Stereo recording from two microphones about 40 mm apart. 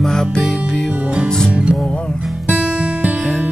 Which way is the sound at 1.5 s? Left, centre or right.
Right.